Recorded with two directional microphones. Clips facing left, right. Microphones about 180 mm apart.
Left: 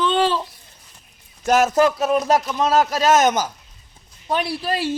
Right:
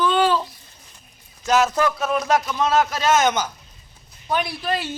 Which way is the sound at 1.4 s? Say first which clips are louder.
Left 2 dB; 50° left (ahead or behind).